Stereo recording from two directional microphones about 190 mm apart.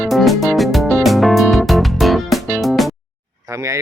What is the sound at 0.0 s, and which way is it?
Music, centre (ahead or behind).